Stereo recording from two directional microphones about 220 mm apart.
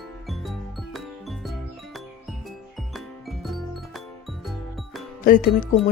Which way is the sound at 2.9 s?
Centre (ahead or behind).